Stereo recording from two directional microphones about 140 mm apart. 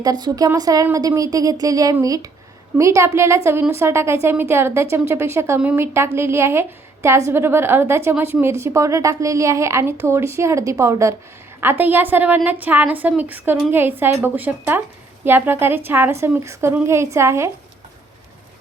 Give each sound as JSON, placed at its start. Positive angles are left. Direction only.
{"t": 0.0, "sound": "a woman's voice", "side_deg": -30}